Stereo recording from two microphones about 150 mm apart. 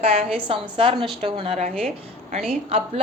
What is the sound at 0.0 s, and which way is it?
A woman's voice, 40° right (ahead or behind).